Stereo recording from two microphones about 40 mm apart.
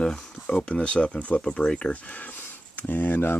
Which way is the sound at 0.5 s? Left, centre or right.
Left.